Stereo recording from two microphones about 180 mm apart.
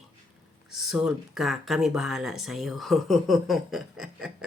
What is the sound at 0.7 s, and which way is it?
Speech, centre (ahead or behind).